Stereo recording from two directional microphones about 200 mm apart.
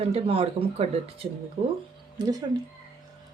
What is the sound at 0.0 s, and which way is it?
Speech, 30° right (ahead or behind).